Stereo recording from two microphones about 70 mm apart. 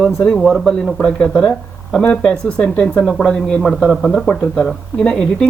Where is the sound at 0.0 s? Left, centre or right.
Centre.